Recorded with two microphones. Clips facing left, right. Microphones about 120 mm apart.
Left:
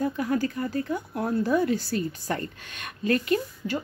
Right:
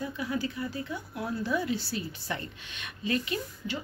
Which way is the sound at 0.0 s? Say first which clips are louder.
Left 7 dB; 50° left (ahead or behind).